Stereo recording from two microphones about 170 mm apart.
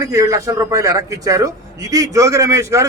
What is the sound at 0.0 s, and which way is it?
A man's voice, 20° right (ahead or behind).